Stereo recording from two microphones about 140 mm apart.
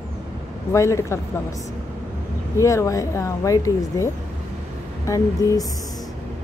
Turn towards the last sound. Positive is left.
turn(degrees=25)  # may be behind; listen again after turning